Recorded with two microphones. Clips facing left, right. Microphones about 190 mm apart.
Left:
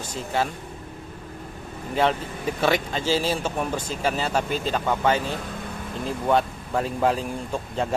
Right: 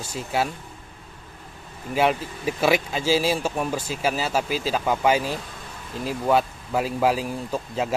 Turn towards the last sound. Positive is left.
turn(degrees=-5)  # may be behind; listen again after turning